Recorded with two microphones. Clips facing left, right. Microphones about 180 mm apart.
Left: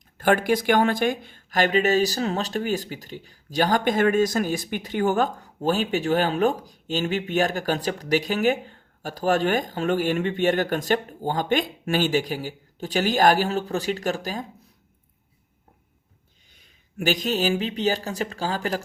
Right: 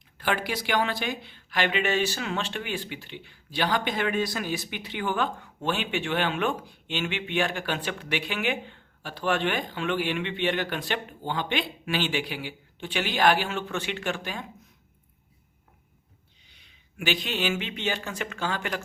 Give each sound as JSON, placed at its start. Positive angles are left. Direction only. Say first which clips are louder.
{"t": 0.2, "sound": "speech", "louder": "left 8 dB", "side_deg": 50}
{"t": 16.6, "sound": "speech", "louder": "left 6 dB", "side_deg": 40}